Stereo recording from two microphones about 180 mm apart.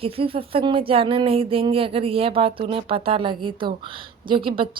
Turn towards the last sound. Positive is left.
turn(degrees=-30)  # may be behind; listen again after turning